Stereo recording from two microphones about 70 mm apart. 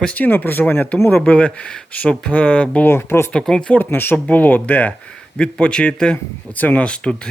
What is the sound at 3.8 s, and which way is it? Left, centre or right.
Speech, left.